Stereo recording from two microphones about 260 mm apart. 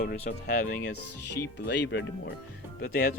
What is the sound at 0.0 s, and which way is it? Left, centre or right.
Speech, left.